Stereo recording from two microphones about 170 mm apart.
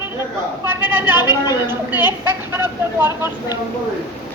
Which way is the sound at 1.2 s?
25° left (ahead or behind).